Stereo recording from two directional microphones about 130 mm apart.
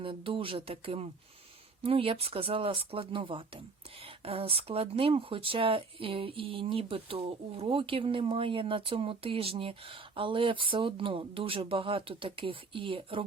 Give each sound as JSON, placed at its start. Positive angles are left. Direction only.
{"t": 0.0, "sound": "speech", "side_deg": -40}